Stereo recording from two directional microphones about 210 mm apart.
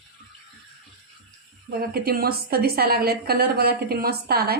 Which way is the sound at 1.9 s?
45° right (ahead or behind).